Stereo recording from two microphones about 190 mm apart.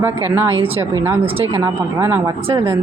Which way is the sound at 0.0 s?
10° right (ahead or behind).